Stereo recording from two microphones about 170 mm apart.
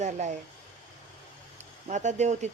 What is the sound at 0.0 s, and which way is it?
Speech, 45° right (ahead or behind).